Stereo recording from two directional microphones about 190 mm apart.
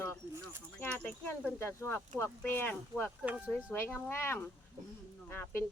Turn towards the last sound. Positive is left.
turn(degrees=10)  # may be behind; listen again after turning